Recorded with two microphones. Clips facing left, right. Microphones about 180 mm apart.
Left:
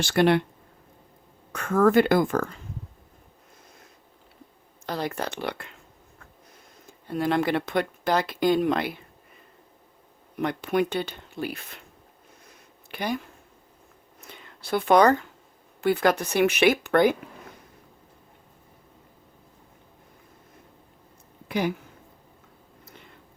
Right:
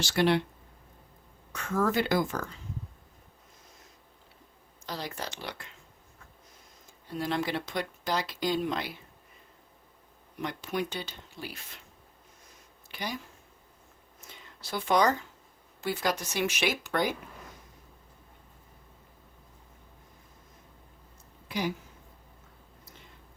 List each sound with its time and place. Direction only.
0.0 s speech: 55° left (ahead or behind)
1.5 s speech: 55° left (ahead or behind)
4.9 s speech: 55° left (ahead or behind)
6.8 s speech: 55° left (ahead or behind)
10.3 s speech: 60° left (ahead or behind)
12.9 s speech: 55° left (ahead or behind)
14.2 s a sound: 60° left (ahead or behind)
15.8 s speech: 60° left (ahead or behind)
21.4 s speech: 55° left (ahead or behind)